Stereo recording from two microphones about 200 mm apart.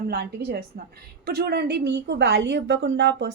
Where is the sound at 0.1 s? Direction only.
55° right (ahead or behind).